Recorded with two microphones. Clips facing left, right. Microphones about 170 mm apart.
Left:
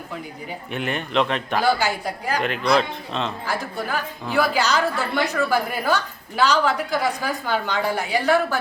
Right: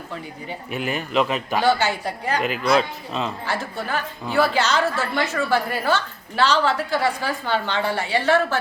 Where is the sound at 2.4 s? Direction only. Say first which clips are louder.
Even; 5° right (ahead or behind).